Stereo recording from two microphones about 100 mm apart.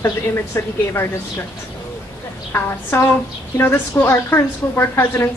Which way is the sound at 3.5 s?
25° left (ahead or behind).